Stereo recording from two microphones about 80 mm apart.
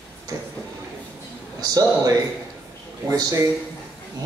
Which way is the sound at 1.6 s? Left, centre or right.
Right.